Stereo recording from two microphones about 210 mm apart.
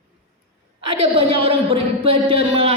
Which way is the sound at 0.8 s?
25° right (ahead or behind).